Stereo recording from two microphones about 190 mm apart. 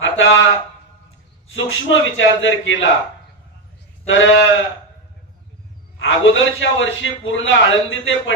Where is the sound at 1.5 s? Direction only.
90° left.